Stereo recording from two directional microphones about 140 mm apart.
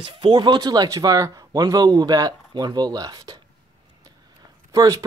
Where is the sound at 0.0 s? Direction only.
35° right (ahead or behind).